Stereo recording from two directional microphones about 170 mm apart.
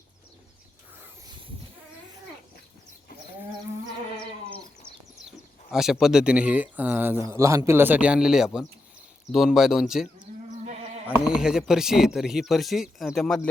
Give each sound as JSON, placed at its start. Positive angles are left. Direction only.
{"t": 4.4, "sound": "livestock", "side_deg": 30}
{"t": 5.7, "sound": "speech", "side_deg": -5}
{"t": 11.1, "sound": "speech", "side_deg": -5}